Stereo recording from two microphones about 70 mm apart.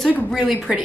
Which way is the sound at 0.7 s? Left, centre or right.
Centre.